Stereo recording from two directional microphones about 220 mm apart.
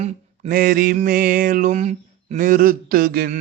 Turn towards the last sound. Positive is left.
turn(degrees=-45)  # may be behind; listen again after turning